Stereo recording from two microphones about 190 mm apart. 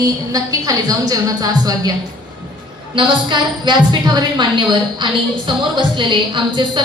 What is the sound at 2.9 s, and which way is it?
A woman's voice, 25° right (ahead or behind).